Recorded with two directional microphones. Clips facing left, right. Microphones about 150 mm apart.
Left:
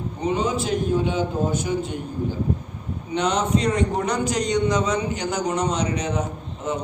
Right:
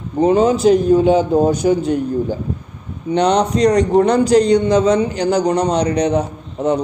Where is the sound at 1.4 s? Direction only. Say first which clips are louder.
Right 10 dB; 80° right.